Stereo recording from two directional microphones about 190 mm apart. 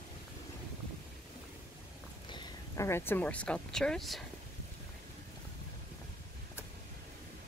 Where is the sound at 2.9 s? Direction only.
10° left (ahead or behind).